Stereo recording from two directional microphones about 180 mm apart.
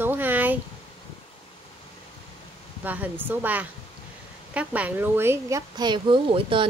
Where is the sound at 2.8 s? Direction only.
10° right (ahead or behind).